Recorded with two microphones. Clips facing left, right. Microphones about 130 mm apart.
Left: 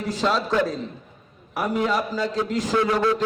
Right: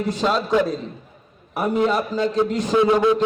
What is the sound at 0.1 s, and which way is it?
A man's voice, 20° right (ahead or behind).